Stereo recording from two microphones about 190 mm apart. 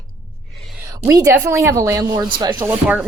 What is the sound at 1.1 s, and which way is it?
Speech, 15° right (ahead or behind).